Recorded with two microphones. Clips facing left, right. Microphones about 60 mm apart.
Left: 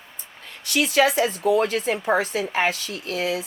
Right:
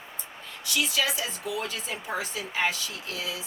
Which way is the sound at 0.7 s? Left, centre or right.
Left.